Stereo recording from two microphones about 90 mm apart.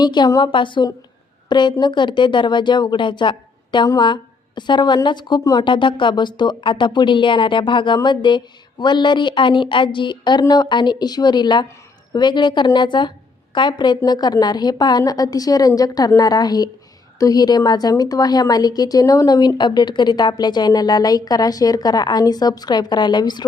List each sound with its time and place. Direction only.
0.0 s a woman's voice: 55° left (ahead or behind)
5.4 s a woman's voice: 45° left (ahead or behind)
5.6 s a woman's voice: 65° left (ahead or behind)